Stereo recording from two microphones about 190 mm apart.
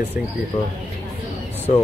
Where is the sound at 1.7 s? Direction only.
35° left (ahead or behind).